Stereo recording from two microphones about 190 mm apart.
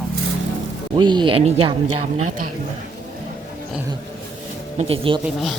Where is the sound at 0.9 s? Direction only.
25° right (ahead or behind).